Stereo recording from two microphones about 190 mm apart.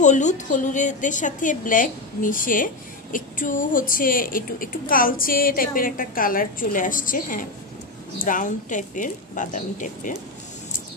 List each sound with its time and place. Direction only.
0.0 s a woman's voice: 40° left (ahead or behind)